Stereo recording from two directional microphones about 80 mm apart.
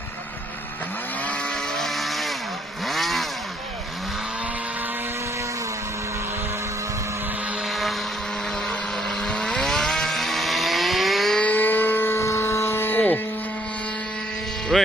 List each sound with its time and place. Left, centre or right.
1.3 s vehicle: centre
2.8 s motorcycle: centre
7.7 s vehicle: centre
9.0 s vehicle: centre
11.3 s motorboat: centre
14.7 s a sound: centre